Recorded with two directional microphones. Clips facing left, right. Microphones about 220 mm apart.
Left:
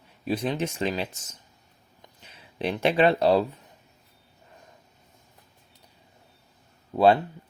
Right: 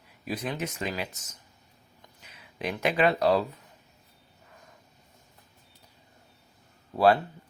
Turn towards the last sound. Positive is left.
turn(degrees=25)  # may be behind; listen again after turning